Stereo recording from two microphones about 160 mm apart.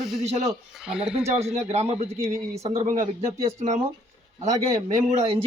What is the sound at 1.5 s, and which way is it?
Speech, 40° right (ahead or behind).